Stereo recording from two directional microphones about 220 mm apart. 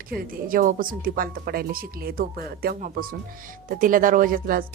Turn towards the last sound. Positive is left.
turn(degrees=-40)  # may be behind; listen again after turning